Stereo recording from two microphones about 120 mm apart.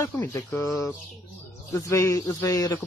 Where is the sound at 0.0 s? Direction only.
20° left (ahead or behind).